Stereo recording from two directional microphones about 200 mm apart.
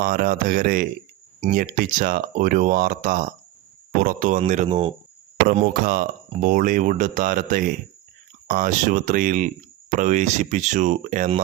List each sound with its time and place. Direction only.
0.0 s speech: 45° right (ahead or behind); by 4.9 s 30° right (ahead or behind)
5.5 s speech: 45° right (ahead or behind)